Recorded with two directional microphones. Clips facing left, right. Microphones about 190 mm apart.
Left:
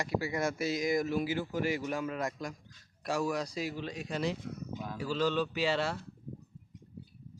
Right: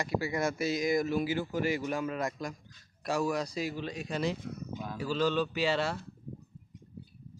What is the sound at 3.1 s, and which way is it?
Speech, 25° right (ahead or behind).